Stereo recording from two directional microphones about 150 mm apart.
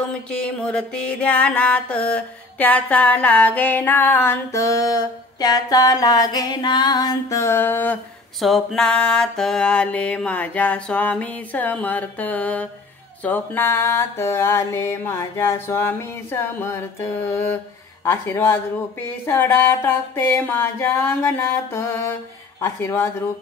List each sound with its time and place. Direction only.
0.3 s mantra: 5° left (ahead or behind)
8.4 s mantra: centre (ahead or behind); by 22.1 s 15° left (ahead or behind)
22.6 s speech: 20° left (ahead or behind)